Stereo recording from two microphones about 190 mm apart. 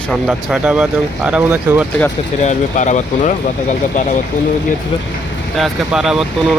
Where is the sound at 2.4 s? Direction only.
40° left (ahead or behind).